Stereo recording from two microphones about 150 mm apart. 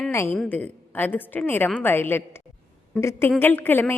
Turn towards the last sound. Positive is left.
turn(degrees=15)  # may be behind; listen again after turning